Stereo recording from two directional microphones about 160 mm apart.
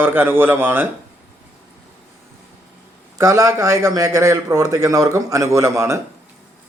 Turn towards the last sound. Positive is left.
turn(degrees=-15)  # may be behind; listen again after turning